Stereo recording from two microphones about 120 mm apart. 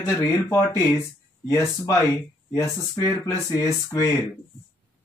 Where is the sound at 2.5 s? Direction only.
25° left (ahead or behind).